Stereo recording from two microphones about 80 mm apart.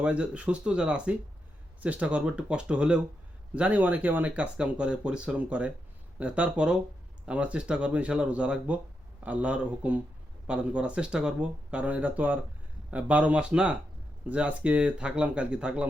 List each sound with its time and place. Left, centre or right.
0.0 s speech: centre